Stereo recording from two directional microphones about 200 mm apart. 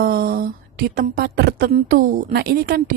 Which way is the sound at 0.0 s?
45° right (ahead or behind).